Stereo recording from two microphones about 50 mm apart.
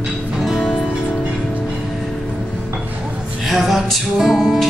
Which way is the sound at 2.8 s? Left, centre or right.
Right.